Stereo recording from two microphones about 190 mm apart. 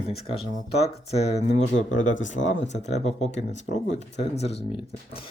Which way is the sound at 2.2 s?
80° left.